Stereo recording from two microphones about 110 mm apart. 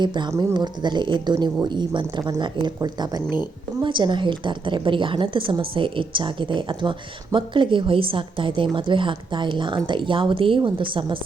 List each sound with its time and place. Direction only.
0.0 s a woman's voice: 45° right (ahead or behind)
3.2 s a woman's voice: 45° left (ahead or behind)
3.8 s a woman's voice: 45° right (ahead or behind)